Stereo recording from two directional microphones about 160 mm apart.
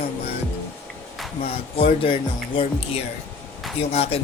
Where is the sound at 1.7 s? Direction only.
35° left (ahead or behind).